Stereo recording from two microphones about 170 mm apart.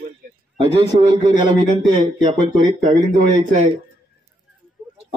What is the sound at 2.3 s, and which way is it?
Speech, 40° right (ahead or behind).